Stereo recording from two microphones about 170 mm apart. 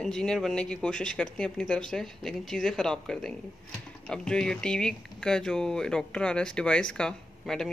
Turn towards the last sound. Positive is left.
turn(degrees=5)  # may be behind; listen again after turning